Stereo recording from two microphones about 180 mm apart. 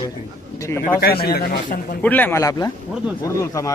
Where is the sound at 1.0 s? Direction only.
60° left (ahead or behind).